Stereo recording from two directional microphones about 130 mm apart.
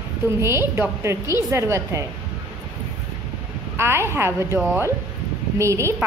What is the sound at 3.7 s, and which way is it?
Speech, 20° right (ahead or behind).